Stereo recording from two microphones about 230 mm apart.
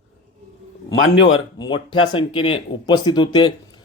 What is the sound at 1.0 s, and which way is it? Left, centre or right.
Speech, left.